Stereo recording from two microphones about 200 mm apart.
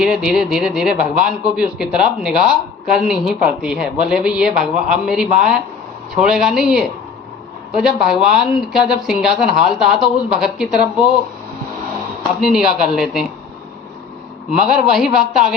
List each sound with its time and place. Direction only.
0.0 s speech: 5° right (ahead or behind)
12.4 s speech: centre (ahead or behind)
14.8 s speech: centre (ahead or behind)